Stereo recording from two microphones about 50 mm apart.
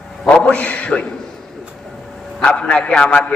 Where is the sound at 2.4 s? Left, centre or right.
Left.